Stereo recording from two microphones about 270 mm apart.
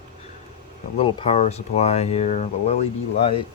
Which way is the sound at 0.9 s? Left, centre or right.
Left.